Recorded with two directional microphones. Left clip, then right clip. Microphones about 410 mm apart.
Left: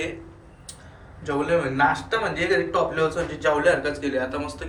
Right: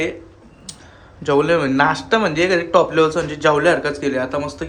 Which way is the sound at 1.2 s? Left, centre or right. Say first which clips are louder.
Right 7 dB; centre.